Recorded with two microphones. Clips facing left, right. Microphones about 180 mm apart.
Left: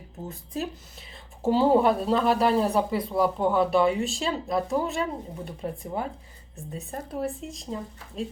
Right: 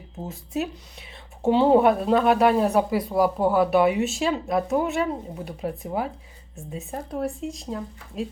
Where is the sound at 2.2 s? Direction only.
55° right (ahead or behind).